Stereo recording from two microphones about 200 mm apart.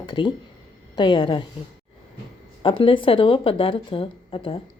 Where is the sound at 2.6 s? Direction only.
25° left (ahead or behind).